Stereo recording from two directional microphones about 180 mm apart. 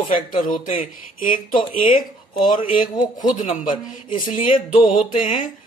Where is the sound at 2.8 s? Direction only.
25° left (ahead or behind).